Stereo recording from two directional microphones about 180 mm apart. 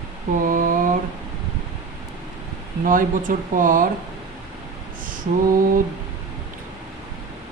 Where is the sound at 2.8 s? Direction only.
50° right (ahead or behind).